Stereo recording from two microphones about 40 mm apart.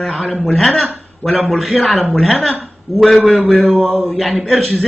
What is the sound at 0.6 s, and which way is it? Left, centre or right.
Speech, centre.